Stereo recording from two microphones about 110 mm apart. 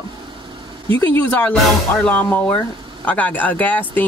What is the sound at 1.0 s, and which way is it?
Speech, 20° left (ahead or behind).